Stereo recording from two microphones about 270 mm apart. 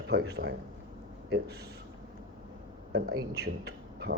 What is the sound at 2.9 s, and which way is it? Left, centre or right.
Speech, right.